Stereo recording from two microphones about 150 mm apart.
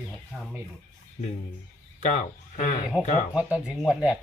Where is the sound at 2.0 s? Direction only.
50° left (ahead or behind).